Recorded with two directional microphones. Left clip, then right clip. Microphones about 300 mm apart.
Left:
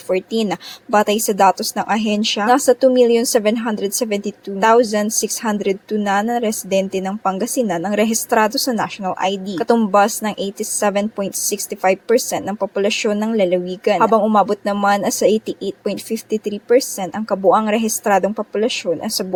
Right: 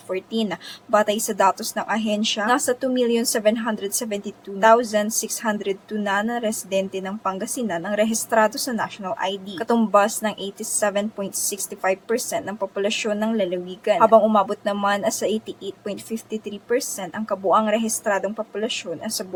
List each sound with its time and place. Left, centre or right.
0.1 s a woman's voice: left